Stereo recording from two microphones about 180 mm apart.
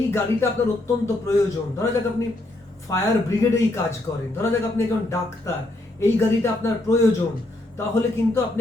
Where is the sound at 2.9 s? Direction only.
15° left (ahead or behind).